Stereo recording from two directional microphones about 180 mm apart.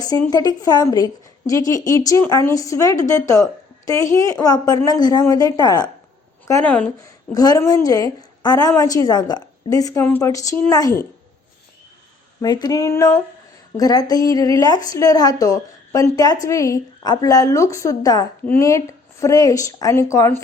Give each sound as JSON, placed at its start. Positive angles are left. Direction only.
{"t": 0.3, "sound": "a woman's voice", "side_deg": 20}
{"t": 6.5, "sound": "speech", "side_deg": 5}
{"t": 7.0, "sound": "a woman's voice", "side_deg": 20}
{"t": 12.4, "sound": "a woman's voice", "side_deg": 20}